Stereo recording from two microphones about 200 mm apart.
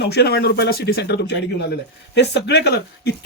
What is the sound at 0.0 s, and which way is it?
Speech, 55° left (ahead or behind).